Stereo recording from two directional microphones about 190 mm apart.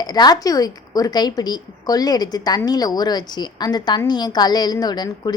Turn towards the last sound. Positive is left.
turn(degrees=20)  # may be behind; listen again after turning